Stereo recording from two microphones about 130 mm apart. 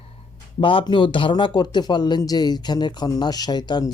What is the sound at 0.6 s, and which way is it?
Speech, 40° left (ahead or behind).